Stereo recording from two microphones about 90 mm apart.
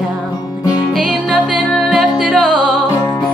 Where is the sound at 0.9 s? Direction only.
5° right (ahead or behind).